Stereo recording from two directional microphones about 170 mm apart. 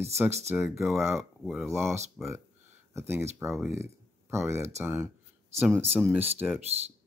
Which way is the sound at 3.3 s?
Centre (ahead or behind).